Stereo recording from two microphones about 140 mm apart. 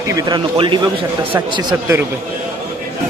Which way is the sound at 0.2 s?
30° right (ahead or behind).